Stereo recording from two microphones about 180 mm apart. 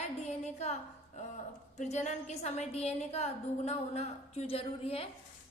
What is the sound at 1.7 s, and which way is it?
A woman's voice, 40° left (ahead or behind).